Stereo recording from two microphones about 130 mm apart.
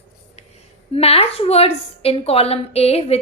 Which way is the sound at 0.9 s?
50° left (ahead or behind).